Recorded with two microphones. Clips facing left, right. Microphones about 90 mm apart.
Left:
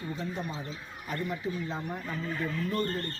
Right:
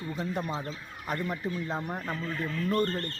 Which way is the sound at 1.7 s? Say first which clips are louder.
Right 2 dB; 45° right (ahead or behind).